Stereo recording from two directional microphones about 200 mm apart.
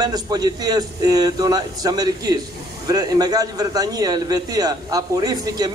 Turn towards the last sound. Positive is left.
turn(degrees=-20)  # may be behind; listen again after turning